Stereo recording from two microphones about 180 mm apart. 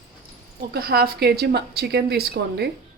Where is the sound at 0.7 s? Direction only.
60° right (ahead or behind).